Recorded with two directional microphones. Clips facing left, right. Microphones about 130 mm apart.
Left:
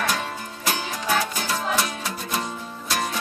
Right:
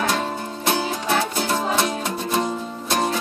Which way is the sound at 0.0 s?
25° right (ahead or behind).